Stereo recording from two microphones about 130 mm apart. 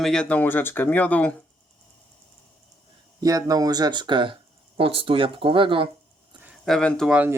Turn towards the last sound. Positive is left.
turn(degrees=-15)  # may be behind; listen again after turning